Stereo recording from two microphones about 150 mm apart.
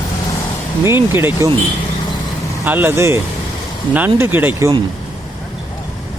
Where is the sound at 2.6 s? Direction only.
15° right (ahead or behind).